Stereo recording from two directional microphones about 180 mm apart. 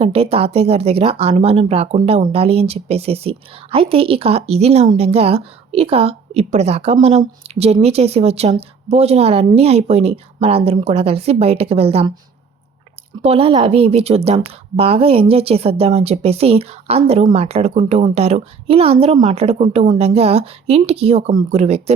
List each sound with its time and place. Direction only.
0.0 s a woman's voice: 35° right (ahead or behind)
13.2 s a woman's voice: 30° right (ahead or behind)